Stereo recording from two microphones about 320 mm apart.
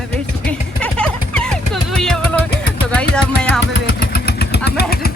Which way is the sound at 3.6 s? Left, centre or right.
Left.